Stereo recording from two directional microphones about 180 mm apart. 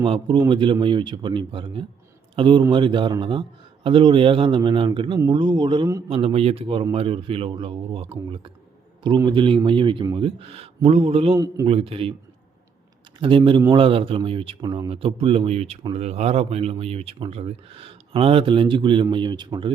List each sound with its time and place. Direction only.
0.0 s a man's voice: 30° right (ahead or behind)
11.3 s a man's voice: 20° right (ahead or behind)
11.6 s speech: 30° right (ahead or behind)
13.1 s a man's voice: 30° right (ahead or behind)